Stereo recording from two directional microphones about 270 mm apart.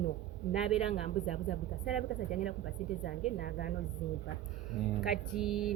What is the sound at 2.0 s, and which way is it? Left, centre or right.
A woman's voice, left.